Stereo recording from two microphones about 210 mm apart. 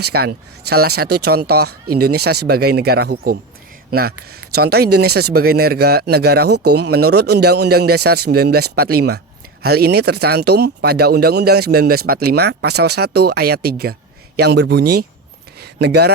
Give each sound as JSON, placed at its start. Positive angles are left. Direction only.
{"t": 0.0, "sound": "speech", "side_deg": -50}
{"t": 0.8, "sound": "speech", "side_deg": -90}
{"t": 1.5, "sound": "speech", "side_deg": -50}
{"t": 15.5, "sound": "a sound", "side_deg": -50}